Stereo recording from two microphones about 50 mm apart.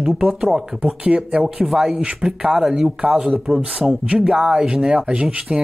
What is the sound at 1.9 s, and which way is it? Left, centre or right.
Speech, right.